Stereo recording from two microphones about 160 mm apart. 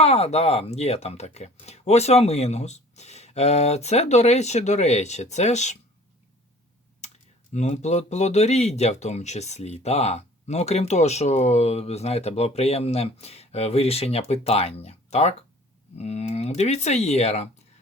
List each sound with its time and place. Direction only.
0.0 s speech: 40° left (ahead or behind)
7.5 s speech: 45° left (ahead or behind)